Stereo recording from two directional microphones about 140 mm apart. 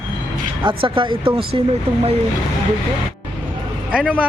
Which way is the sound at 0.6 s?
35° right (ahead or behind).